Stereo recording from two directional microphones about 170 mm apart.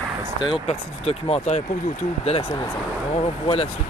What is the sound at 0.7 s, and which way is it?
Speech, 35° left (ahead or behind).